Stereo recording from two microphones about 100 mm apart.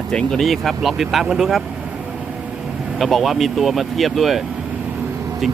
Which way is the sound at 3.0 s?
Centre (ahead or behind).